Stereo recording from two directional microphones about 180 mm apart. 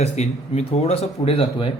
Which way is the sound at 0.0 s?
35° left (ahead or behind).